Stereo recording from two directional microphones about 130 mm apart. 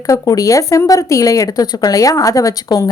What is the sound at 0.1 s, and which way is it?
Speech, 25° left (ahead or behind).